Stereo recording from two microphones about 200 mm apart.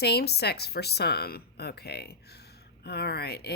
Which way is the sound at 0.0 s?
55° left (ahead or behind).